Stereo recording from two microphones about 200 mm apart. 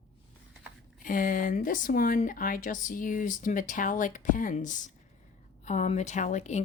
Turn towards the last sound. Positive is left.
turn(degrees=35)  # may be behind; listen again after turning